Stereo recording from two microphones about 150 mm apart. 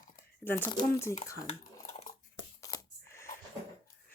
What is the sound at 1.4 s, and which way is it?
Dishes, 45° left (ahead or behind).